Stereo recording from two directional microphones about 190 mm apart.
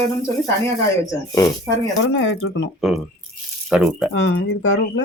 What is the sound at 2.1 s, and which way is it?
Speech, 85° left.